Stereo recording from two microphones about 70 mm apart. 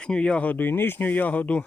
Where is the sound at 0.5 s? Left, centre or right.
Left.